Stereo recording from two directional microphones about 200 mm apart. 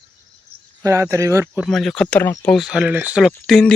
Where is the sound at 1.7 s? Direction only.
Centre (ahead or behind).